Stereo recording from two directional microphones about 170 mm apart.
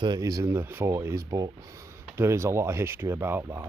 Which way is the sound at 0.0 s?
20° right (ahead or behind).